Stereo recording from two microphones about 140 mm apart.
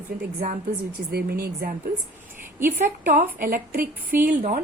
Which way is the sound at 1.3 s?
90° right.